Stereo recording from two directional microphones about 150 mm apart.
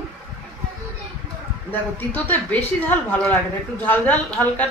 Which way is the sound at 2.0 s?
10° left (ahead or behind).